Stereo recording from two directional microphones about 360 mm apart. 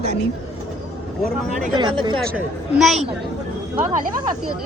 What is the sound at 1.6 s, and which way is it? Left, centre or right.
Speech, centre.